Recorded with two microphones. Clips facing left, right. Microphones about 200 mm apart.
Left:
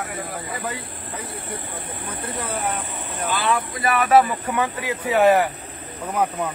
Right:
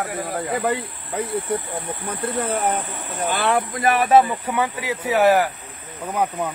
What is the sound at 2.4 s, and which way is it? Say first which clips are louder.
Speech: right 4 dB; 50° right (ahead or behind).